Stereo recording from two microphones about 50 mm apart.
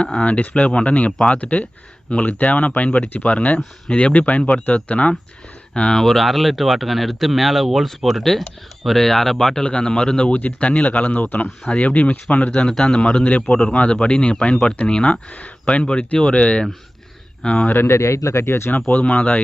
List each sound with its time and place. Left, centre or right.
0.0 s a man's voice: centre
0.3 s a man's voice: left; by 9.6 s centre
9.6 s a man's voice: left
17.8 s speech: left
19.0 s a man's voice: left